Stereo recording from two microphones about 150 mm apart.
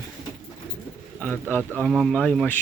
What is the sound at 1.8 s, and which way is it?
Speech, centre (ahead or behind).